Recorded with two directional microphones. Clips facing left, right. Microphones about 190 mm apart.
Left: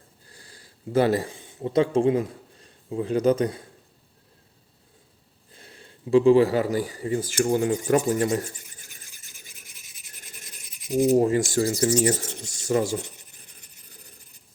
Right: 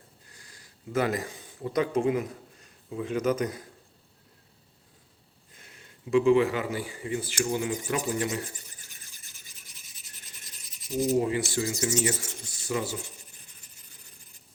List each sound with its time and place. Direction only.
0.3 s speech: 30° left (ahead or behind)
5.5 s a man's voice: 30° left (ahead or behind)
11.1 s speech: 45° left (ahead or behind)